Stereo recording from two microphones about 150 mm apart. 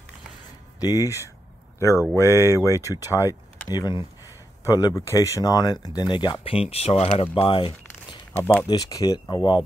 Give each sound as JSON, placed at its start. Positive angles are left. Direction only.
{"t": 0.7, "sound": "speech", "side_deg": 25}
{"t": 8.3, "sound": "speech", "side_deg": 15}
{"t": 8.6, "sound": "speech", "side_deg": 25}